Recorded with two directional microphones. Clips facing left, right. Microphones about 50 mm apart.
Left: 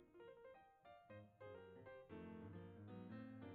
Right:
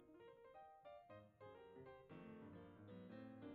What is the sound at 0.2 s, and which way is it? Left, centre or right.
Music, centre.